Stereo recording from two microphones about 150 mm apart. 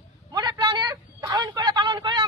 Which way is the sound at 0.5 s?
35° right (ahead or behind).